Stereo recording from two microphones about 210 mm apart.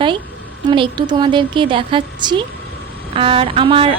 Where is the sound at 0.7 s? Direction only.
20° right (ahead or behind).